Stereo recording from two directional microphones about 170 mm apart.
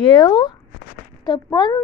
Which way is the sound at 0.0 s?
25° left (ahead or behind).